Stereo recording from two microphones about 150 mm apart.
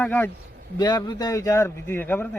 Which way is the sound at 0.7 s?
30° left (ahead or behind).